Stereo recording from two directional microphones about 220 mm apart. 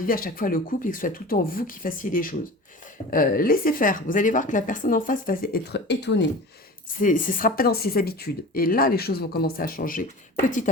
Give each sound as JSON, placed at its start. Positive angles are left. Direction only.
{"t": 0.0, "sound": "speech", "side_deg": 40}
{"t": 7.0, "sound": "speech", "side_deg": 35}